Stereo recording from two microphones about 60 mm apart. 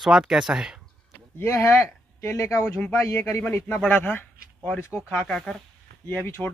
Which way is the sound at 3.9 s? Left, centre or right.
Left.